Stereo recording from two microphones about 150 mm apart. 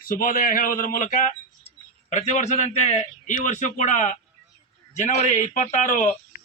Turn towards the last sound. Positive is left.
turn(degrees=60)  # may be behind; listen again after turning